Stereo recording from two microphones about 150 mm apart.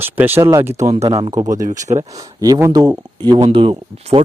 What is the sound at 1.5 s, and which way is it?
Speech, 55° right (ahead or behind).